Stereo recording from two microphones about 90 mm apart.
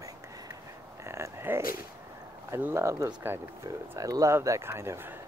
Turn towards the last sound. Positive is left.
turn(degrees=-30)  # may be behind; listen again after turning